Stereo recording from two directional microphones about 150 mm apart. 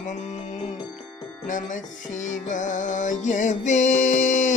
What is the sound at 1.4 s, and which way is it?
Music, 60° left (ahead or behind).